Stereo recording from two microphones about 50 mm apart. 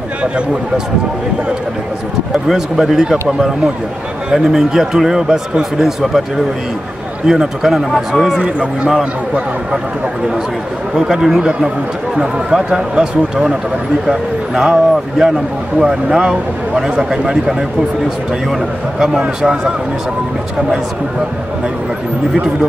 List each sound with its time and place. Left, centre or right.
2.3 s speech: centre
7.2 s a man's voice: centre
8.4 s speech: centre
11.0 s speech: centre